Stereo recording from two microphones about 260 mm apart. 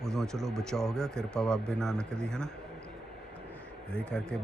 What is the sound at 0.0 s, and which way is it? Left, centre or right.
Speech, centre.